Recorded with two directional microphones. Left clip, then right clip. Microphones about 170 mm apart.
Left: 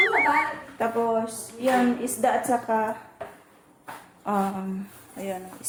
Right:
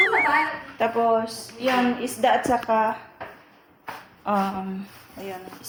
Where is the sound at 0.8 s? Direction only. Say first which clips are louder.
Right 4 dB; 15° left (ahead or behind).